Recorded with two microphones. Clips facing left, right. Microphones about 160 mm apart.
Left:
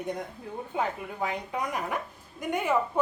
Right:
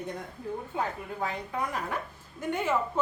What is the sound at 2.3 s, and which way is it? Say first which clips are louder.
Speech: left 1 dB; 15° left (ahead or behind).